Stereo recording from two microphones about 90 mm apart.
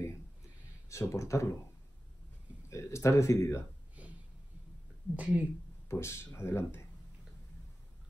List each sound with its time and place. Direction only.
0.8 s speech: 35° left (ahead or behind)
2.7 s speech: 35° left (ahead or behind)
4.0 s a sound: 15° right (ahead or behind)
5.1 s speech: 15° right (ahead or behind)
5.9 s speech: 30° left (ahead or behind)